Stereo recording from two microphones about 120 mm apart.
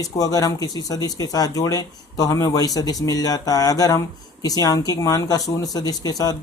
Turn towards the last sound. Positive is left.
turn(degrees=30)  # may be behind; listen again after turning